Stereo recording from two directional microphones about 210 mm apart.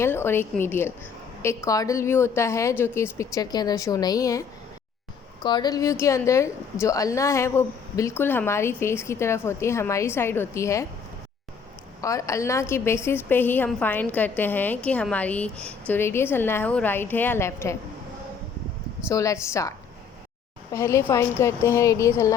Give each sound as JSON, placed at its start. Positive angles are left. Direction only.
{"t": 0.0, "sound": "a woman's voice", "side_deg": 10}
{"t": 12.0, "sound": "a woman's voice", "side_deg": 15}
{"t": 19.0, "sound": "a woman's voice", "side_deg": 15}
{"t": 20.7, "sound": "a woman's voice", "side_deg": 15}